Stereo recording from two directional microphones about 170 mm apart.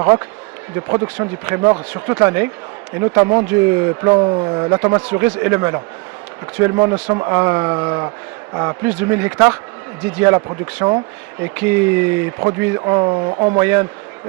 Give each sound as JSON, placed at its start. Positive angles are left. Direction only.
{"t": 0.8, "sound": "speech", "side_deg": -15}
{"t": 4.2, "sound": "speech", "side_deg": -25}
{"t": 13.6, "sound": "speech", "side_deg": -15}